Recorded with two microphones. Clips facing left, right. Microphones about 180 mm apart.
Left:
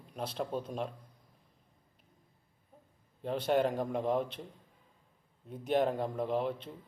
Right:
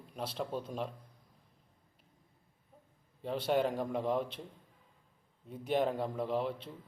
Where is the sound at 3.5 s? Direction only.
5° left (ahead or behind).